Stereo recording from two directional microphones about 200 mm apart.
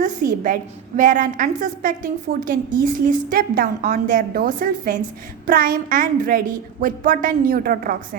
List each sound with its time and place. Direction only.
0.0 s a woman's voice: 40° right (ahead or behind)